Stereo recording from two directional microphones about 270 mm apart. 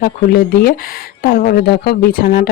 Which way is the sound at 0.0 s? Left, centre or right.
Left.